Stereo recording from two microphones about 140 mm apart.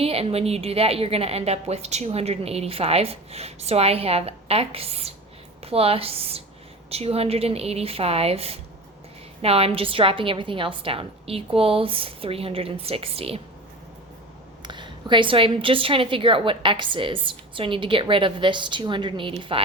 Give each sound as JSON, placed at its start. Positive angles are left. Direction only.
{"t": 0.0, "sound": "a woman's voice", "side_deg": -45}
{"t": 14.6, "sound": "a woman's voice", "side_deg": -35}